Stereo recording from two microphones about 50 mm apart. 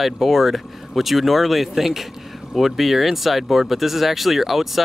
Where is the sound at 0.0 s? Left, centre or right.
Centre.